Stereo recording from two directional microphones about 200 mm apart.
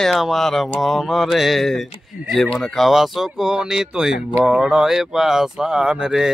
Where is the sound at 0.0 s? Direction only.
Centre (ahead or behind).